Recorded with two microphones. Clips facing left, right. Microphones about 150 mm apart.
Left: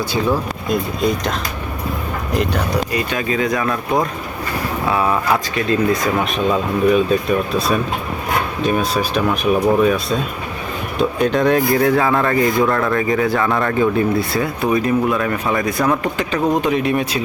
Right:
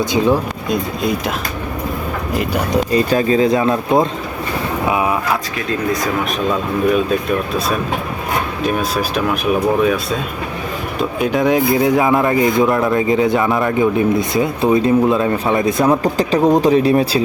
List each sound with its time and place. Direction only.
0.0 s speech: 20° right (ahead or behind)
0.7 s speech: centre (ahead or behind)
2.3 s speech: 5° right (ahead or behind)
2.9 s speech: 35° right (ahead or behind)
4.9 s speech: 15° right (ahead or behind)
8.6 s speech: centre (ahead or behind); by 17.2 s 30° right (ahead or behind)